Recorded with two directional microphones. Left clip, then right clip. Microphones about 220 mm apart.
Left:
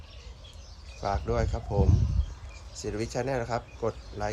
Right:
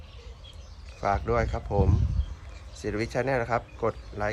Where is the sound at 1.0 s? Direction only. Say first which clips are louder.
Right 4 dB; 5° left (ahead or behind).